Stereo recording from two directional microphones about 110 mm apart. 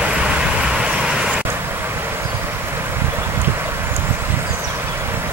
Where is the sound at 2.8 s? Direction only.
20° right (ahead or behind).